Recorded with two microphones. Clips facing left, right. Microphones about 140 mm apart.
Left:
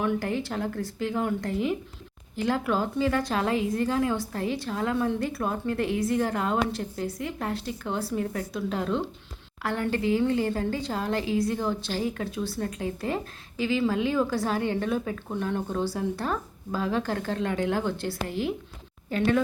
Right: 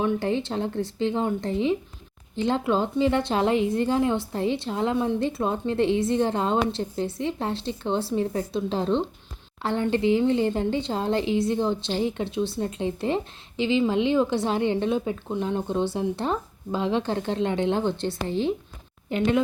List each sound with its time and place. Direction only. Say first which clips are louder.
0.0 s a woman's voice: right 3 dB; 25° right (ahead or behind)